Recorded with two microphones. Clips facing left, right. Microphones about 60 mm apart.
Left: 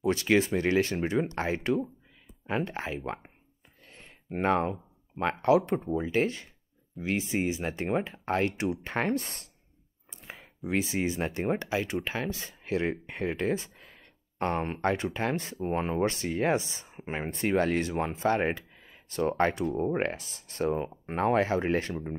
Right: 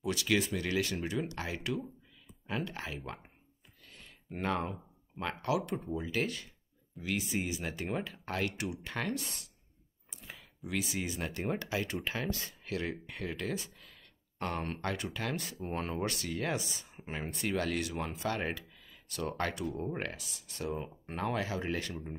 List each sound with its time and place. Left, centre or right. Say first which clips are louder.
0.0 s speech: left 7 dB; left
3.8 s a sound: left 3 dB; left
4.4 s speech: left 8 dB; left